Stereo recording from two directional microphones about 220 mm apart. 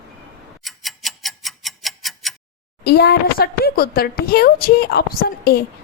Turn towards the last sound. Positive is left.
turn(degrees=45)  # may be behind; listen again after turning